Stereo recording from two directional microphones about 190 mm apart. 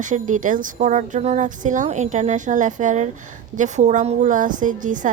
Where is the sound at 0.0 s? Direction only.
40° right (ahead or behind).